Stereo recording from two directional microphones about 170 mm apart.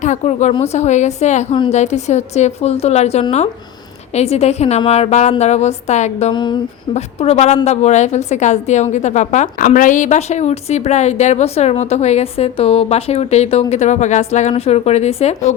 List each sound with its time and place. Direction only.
0.0 s a woman's voice: 45° left (ahead or behind)
6.3 s a sound: 25° left (ahead or behind)
6.9 s a woman's voice: 40° left (ahead or behind)